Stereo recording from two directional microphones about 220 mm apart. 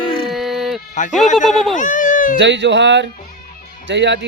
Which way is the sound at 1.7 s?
35° left (ahead or behind).